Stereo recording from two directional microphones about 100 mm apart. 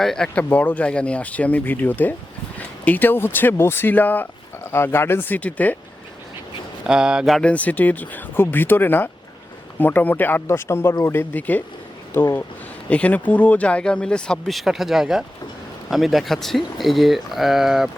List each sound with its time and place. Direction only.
0.0 s speech: 5° left (ahead or behind)
0.4 s speech: 15° left (ahead or behind)
6.8 s speech: 5° right (ahead or behind)
7.4 s speech: 15° left (ahead or behind); by 17.8 s 5° right (ahead or behind)